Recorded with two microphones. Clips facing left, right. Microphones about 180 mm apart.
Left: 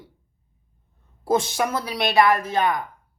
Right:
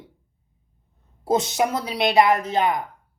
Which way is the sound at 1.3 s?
20° right (ahead or behind).